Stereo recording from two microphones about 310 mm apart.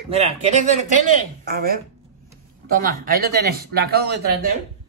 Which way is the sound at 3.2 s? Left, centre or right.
Right.